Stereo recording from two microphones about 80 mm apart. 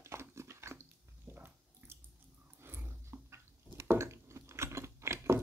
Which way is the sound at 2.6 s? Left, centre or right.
Right.